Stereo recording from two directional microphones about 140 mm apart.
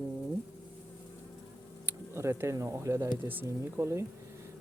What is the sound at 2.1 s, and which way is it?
Speech, 20° right (ahead or behind).